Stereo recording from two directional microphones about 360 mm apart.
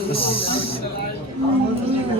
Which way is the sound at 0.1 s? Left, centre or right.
Centre.